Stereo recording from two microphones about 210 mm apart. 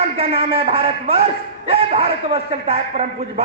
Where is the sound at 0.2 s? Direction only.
25° right (ahead or behind).